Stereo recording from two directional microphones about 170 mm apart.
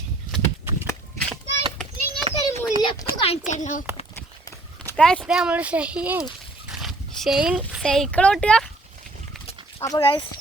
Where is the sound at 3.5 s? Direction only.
45° left (ahead or behind).